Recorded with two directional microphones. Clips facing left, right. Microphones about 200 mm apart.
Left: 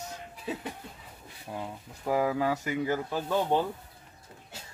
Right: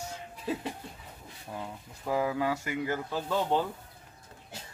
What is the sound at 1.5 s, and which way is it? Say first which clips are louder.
Speech: left 2 dB; 15° left (ahead or behind).